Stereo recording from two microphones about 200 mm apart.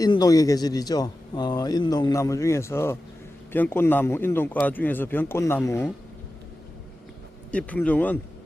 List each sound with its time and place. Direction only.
0.0 s speech: 20° left (ahead or behind)
7.5 s speech: 5° left (ahead or behind)